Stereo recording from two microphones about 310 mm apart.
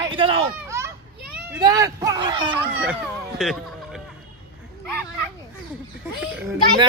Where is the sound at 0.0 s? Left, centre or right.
Centre.